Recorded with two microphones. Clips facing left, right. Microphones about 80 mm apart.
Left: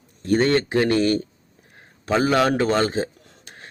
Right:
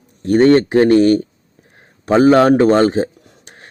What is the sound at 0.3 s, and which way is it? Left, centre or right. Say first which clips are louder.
A man's voice: right 8 dB; right.